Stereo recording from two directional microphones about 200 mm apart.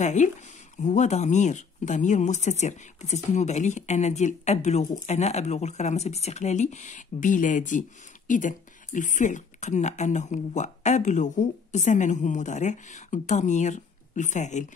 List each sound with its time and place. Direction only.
0.0 s speech: 35° left (ahead or behind)